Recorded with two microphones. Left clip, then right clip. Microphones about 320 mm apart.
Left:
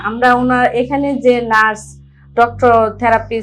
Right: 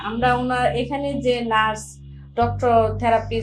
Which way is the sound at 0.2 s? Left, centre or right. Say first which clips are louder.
Left 8 dB; left.